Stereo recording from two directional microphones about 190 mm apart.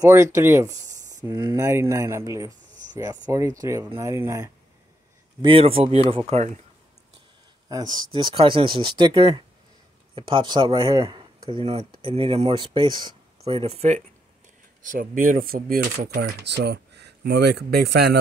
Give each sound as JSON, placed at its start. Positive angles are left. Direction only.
{"t": 0.0, "sound": "speech", "side_deg": -15}
{"t": 5.4, "sound": "speech", "side_deg": -30}
{"t": 7.7, "sound": "speech", "side_deg": -20}